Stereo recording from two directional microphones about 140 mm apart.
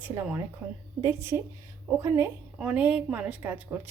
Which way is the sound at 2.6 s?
10° right (ahead or behind).